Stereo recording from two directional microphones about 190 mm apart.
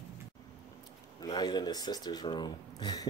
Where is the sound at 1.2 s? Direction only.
20° left (ahead or behind).